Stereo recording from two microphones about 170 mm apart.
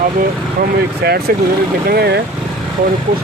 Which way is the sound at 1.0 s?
70° right (ahead or behind).